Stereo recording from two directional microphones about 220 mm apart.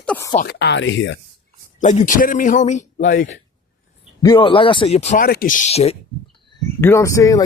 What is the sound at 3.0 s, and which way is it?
Speech, 50° left (ahead or behind).